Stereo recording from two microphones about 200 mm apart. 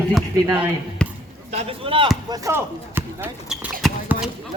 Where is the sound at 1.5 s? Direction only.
30° right (ahead or behind).